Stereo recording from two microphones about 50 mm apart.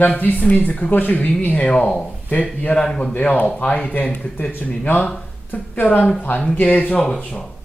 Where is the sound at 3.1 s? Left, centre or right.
Left.